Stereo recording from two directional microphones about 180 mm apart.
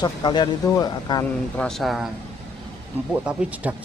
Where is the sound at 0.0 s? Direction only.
25° left (ahead or behind).